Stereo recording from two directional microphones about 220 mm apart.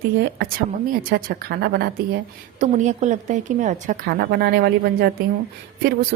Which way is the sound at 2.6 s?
35° right (ahead or behind).